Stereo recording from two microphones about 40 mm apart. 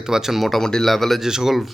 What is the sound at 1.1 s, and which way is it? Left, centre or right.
Speech, centre.